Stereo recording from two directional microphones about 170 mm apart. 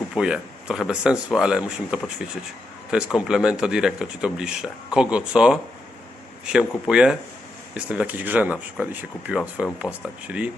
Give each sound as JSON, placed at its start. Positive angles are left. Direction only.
{"t": 0.1, "sound": "speech", "side_deg": -5}